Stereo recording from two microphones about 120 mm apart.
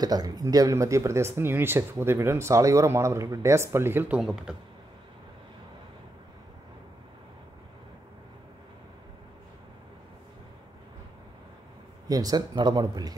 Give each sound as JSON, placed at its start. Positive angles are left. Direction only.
{"t": 0.0, "sound": "speech", "side_deg": -35}
{"t": 12.1, "sound": "speech", "side_deg": -30}